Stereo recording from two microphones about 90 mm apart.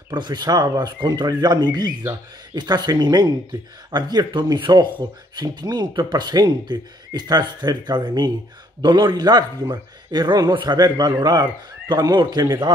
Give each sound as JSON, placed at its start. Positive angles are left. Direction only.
{"t": 0.1, "sound": "speech", "side_deg": -55}